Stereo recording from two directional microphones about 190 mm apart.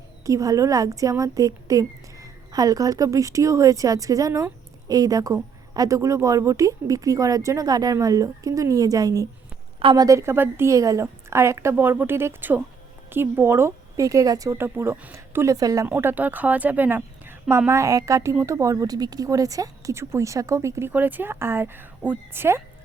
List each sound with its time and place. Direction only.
0.3 s speech: 15° right (ahead or behind)